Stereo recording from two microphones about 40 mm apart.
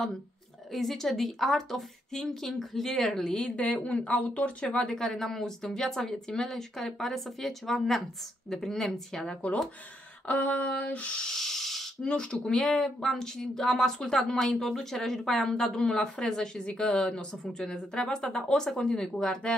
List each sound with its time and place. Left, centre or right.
0.7 s speech: centre
4.1 s speech: left
4.8 s speech: centre
10.2 s speech: left
11.1 s a sound: centre
12.0 s speech: left
16.7 s speech: left